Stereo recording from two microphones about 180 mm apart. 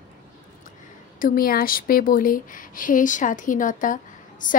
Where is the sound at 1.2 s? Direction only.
55° left (ahead or behind).